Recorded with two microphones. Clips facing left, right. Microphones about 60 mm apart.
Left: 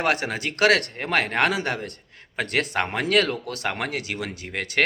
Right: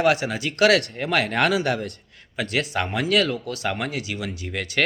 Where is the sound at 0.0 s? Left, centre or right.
Left.